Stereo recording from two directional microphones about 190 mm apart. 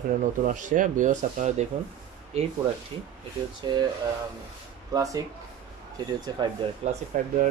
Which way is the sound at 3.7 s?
25° right (ahead or behind).